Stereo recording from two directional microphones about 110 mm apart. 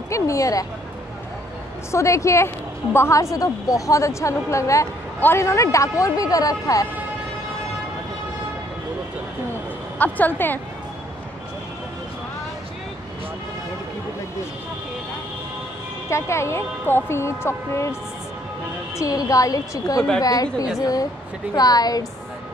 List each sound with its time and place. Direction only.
0.1 s a woman's voice: 30° left (ahead or behind)
1.9 s a woman's voice: 25° left (ahead or behind)
9.9 s a woman's voice: 15° left (ahead or behind)
16.1 s a woman's voice: 25° left (ahead or behind)
18.9 s a woman's voice: 30° left (ahead or behind)